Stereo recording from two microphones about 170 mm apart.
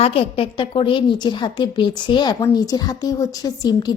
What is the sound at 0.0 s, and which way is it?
A woman's voice, 35° left (ahead or behind).